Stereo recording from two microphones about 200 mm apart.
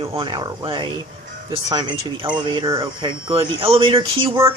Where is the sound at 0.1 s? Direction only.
25° right (ahead or behind).